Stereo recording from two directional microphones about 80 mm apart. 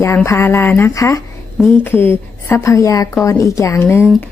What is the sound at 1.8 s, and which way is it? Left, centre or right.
Speech, left.